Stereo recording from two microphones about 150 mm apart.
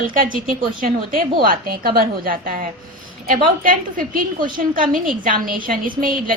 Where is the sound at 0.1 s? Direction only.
65° right (ahead or behind).